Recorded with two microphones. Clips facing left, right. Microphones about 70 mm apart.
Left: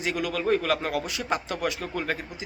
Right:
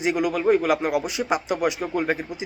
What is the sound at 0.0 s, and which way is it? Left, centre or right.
A man's voice, right.